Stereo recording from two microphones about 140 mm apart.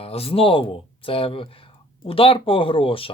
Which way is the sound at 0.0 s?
45° left (ahead or behind).